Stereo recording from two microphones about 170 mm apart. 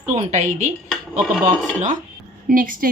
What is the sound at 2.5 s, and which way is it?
Speech, 55° right (ahead or behind).